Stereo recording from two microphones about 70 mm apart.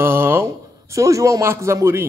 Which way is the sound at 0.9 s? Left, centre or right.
Right.